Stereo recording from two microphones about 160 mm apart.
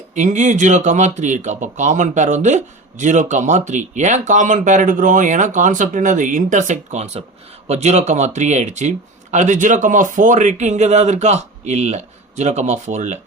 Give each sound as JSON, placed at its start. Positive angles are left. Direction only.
{"t": 0.1, "sound": "speech", "side_deg": -50}